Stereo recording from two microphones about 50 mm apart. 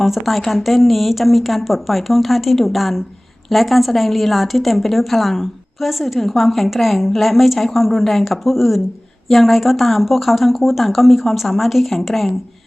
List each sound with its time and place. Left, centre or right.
0.0 s a woman's voice: centre